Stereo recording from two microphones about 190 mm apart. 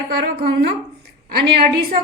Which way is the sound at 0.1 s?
60° right (ahead or behind).